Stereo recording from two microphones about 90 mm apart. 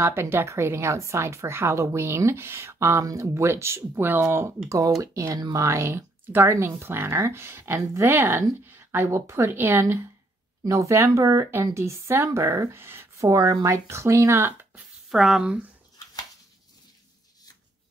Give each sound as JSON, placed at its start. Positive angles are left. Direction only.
{"t": 0.0, "sound": "a woman's voice", "side_deg": -25}
{"t": 4.6, "sound": "a woman's voice", "side_deg": -35}
{"t": 15.0, "sound": "speech", "side_deg": -5}